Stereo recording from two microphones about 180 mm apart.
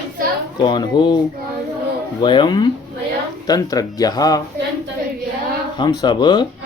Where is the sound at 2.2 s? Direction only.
25° left (ahead or behind).